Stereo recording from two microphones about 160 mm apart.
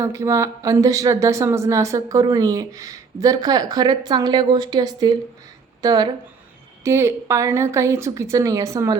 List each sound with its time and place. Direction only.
0.0 s speech: 20° right (ahead or behind)